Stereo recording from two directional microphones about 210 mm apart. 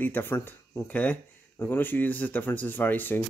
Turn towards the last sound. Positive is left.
turn(degrees=10)  # may be behind; listen again after turning